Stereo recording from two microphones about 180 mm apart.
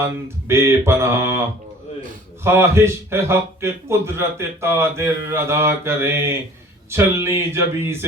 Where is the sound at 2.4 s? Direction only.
15° right (ahead or behind).